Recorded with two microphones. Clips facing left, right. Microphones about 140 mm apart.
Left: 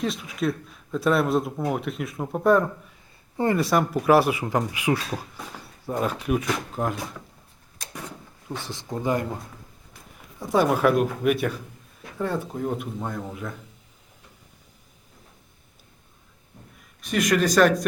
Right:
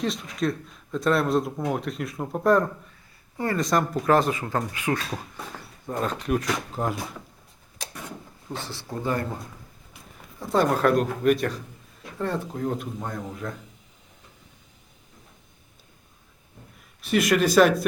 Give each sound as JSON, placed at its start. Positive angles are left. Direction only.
{"t": 0.0, "sound": "speech", "side_deg": 5}
{"t": 3.3, "sound": "speech", "side_deg": 20}
{"t": 3.6, "sound": "speech", "side_deg": 5}
{"t": 8.4, "sound": "speech", "side_deg": 15}
{"t": 10.4, "sound": "speech", "side_deg": 5}
{"t": 17.0, "sound": "speech", "side_deg": -5}